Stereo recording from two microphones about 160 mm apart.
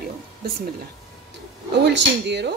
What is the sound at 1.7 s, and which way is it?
Speech, 90° right.